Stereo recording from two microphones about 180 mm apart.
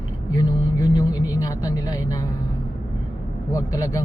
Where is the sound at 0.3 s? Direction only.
20° left (ahead or behind).